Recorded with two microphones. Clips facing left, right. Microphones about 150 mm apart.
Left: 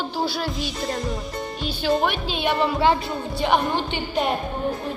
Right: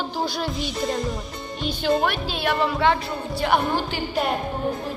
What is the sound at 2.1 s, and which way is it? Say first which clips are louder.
Speech: left 1 dB; 20° left (ahead or behind).